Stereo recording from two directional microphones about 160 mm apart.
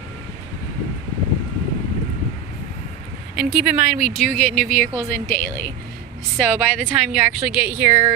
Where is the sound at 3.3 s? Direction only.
Centre (ahead or behind).